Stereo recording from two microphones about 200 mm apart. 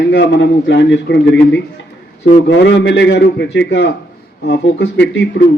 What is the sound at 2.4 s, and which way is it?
A man's voice, 60° left (ahead or behind).